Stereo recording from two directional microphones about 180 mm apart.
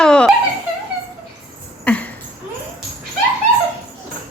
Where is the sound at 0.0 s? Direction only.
5° left (ahead or behind).